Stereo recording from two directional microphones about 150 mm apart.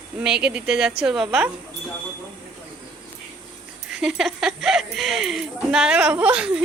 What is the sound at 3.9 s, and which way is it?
Speech, 5° right (ahead or behind).